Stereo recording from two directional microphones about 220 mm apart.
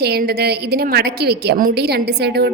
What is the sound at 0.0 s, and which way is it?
A woman's voice, 45° right (ahead or behind).